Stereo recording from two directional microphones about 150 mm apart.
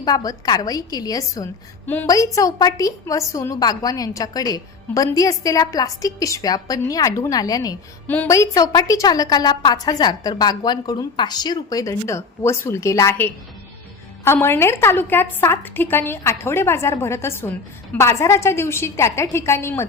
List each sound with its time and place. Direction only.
0.0 s a woman's voice: 25° left (ahead or behind)
8.0 s a woman's voice: 10° left (ahead or behind)